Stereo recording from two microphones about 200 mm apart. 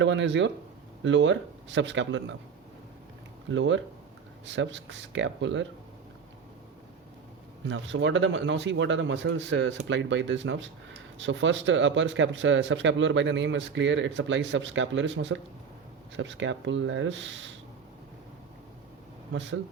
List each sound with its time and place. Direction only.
0.0 s speech: 65° right (ahead or behind)
3.5 s speech: 70° right (ahead or behind)
7.7 s speech: 65° right (ahead or behind)
19.3 s speech: 65° right (ahead or behind)